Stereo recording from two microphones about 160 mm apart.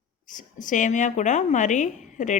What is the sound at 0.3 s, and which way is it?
Speech, 55° left (ahead or behind).